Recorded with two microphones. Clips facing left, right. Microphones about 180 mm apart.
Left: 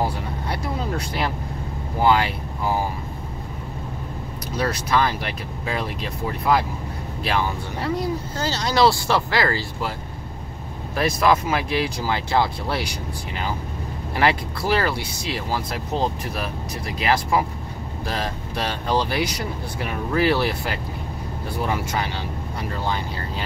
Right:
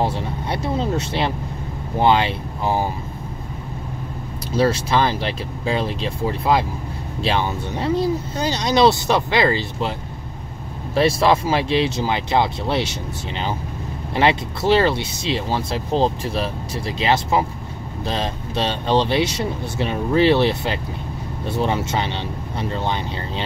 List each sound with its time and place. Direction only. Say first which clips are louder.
0.0 s vehicle: right 3 dB; 25° right (ahead or behind)
2.0 s speech: right 2 dB; 25° right (ahead or behind)
4.5 s speech: right 5 dB; 25° right (ahead or behind)
11.0 s speech: right 3 dB; 30° right (ahead or behind)
14.1 s speech: right 3 dB; 25° right (ahead or behind)